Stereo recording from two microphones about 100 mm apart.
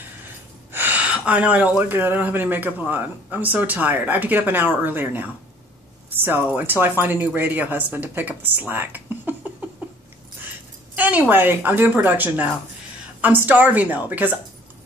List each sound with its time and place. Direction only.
0.7 s speech: 15° right (ahead or behind)
11.0 s speech: 15° right (ahead or behind)